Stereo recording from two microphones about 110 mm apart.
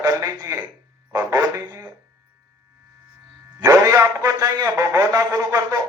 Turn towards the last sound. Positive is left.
turn(degrees=-30)  # may be behind; listen again after turning